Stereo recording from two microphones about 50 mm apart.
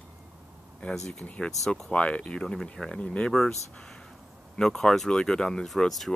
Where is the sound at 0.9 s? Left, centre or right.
Centre.